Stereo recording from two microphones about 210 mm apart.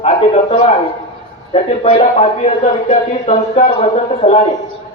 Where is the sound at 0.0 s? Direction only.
30° left (ahead or behind).